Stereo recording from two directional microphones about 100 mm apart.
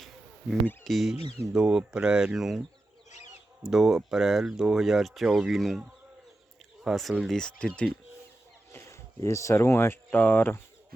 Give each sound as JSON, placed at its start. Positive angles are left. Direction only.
{"t": 0.9, "sound": "speech", "side_deg": 0}
{"t": 3.7, "sound": "speech", "side_deg": -5}
{"t": 6.8, "sound": "speech", "side_deg": 0}
{"t": 8.7, "sound": "speech", "side_deg": 30}